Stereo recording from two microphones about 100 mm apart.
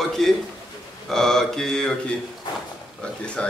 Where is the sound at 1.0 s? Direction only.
5° left (ahead or behind).